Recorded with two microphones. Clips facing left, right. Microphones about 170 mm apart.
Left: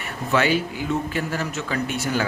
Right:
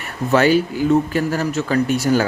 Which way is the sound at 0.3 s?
40° right (ahead or behind).